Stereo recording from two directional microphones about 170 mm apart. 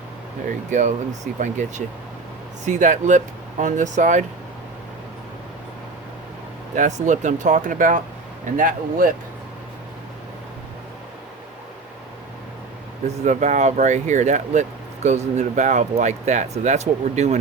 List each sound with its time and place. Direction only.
0.7 s speech: 45° right (ahead or behind)
6.7 s speech: 45° right (ahead or behind)
13.2 s speech: 45° right (ahead or behind)